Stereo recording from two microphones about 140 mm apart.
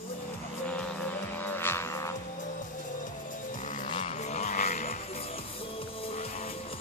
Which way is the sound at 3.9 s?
55° left (ahead or behind).